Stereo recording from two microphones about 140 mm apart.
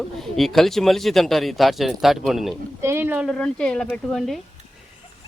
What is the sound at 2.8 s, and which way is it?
Speech, 15° right (ahead or behind).